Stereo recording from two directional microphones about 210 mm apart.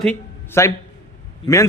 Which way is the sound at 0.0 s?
10° left (ahead or behind).